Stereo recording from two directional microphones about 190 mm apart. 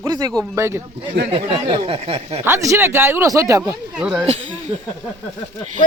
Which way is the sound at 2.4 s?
15° right (ahead or behind).